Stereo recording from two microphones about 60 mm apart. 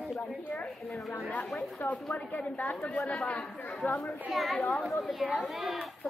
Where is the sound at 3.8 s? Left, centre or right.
Left.